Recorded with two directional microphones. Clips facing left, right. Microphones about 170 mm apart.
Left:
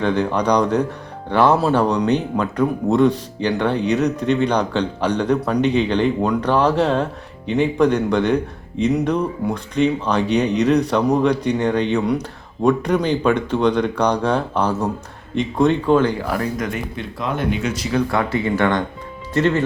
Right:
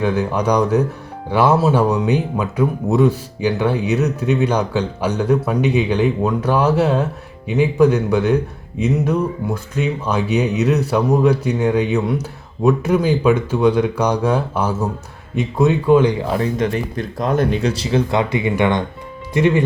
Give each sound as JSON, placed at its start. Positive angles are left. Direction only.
{"t": 0.0, "sound": "speech", "side_deg": -5}
{"t": 16.9, "sound": "speech", "side_deg": -40}